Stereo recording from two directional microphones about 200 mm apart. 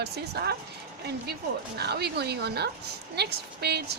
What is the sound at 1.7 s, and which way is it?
Speech, 55° right (ahead or behind).